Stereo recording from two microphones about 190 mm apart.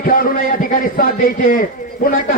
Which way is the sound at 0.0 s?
50° left (ahead or behind).